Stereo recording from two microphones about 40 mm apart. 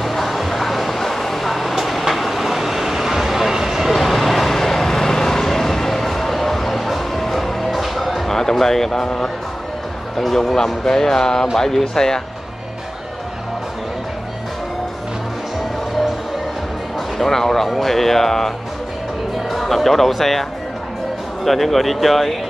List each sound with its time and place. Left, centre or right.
0.0 s vehicle: centre
8.3 s speech: centre
17.2 s speech: centre
19.5 s speech: centre
21.5 s speech: centre